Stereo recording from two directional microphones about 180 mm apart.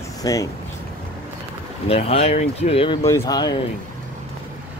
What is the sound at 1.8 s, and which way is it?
Speech, 35° left (ahead or behind).